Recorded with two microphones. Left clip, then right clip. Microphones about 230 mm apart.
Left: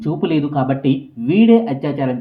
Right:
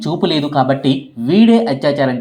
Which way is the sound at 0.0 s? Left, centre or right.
Centre.